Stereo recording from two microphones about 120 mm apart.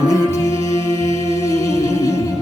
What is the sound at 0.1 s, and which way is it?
Music, 25° left (ahead or behind).